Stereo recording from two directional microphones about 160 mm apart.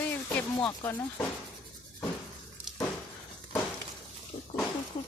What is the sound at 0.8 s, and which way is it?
Speech, 15° left (ahead or behind).